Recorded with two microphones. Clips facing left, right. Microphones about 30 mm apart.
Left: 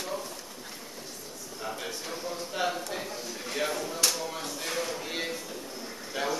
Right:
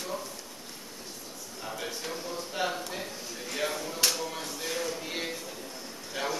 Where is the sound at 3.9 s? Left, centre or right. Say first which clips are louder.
Right 1 dB; centre.